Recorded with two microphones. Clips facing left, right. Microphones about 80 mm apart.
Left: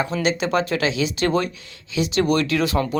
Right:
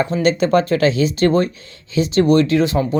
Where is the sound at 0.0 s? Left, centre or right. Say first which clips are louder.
Right 5 dB; right.